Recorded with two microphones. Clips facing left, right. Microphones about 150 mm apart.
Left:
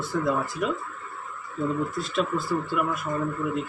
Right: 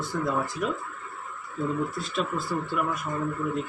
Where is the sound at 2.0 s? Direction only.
Centre (ahead or behind).